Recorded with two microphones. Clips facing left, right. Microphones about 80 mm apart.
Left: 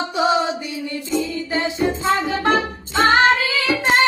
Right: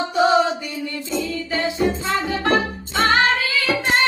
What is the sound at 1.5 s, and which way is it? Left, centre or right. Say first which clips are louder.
Music: right 2 dB; left.